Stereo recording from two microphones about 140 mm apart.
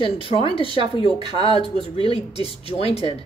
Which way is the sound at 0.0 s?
40° left (ahead or behind).